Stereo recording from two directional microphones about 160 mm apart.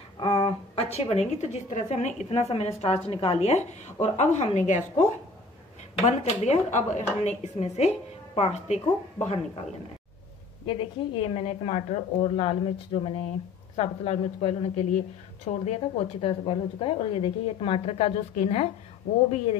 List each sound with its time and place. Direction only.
0.2 s a woman's voice: 30° left (ahead or behind); by 4.8 s 50° left (ahead or behind)
6.0 s speech: 45° left (ahead or behind)
10.7 s speech: 35° left (ahead or behind)